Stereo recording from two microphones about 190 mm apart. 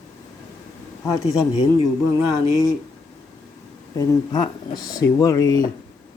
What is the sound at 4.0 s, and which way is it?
Speech, 20° left (ahead or behind).